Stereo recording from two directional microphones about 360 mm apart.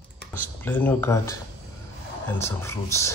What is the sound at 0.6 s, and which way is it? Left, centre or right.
Speech, centre.